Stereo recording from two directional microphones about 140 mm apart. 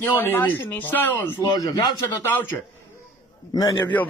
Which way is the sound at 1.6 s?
25° left (ahead or behind).